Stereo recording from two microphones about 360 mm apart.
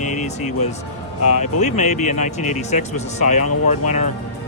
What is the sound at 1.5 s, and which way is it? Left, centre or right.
Speech, centre.